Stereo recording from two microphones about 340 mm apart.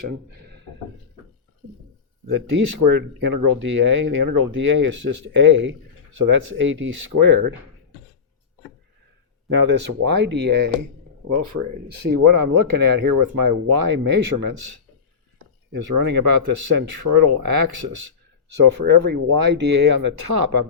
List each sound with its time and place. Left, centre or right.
2.2 s speech: right
9.5 s speech: right
11.5 s speech: right
11.9 s speech: right